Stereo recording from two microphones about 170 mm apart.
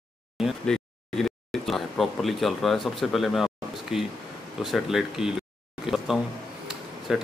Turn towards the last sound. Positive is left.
turn(degrees=0)  # may be behind; listen again after turning